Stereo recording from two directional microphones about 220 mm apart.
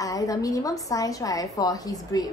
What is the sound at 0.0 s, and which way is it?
A woman's voice, 15° left (ahead or behind).